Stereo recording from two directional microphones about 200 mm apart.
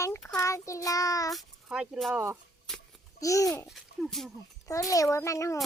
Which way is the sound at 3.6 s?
Centre (ahead or behind).